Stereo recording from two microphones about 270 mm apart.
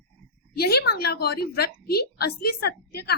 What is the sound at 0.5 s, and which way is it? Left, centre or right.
A woman's voice, left.